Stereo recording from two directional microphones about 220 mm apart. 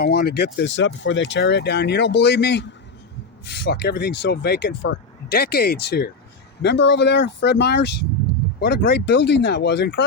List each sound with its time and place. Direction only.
0.0 s speech: 45° left (ahead or behind)